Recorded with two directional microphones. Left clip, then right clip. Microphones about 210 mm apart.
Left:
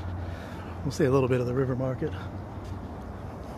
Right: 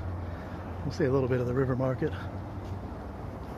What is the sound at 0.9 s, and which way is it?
Speech, 25° left (ahead or behind).